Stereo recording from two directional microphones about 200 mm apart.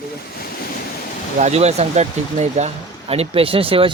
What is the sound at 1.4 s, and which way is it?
Speech, 35° right (ahead or behind).